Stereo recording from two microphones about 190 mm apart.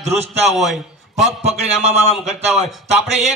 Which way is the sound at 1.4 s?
35° right (ahead or behind).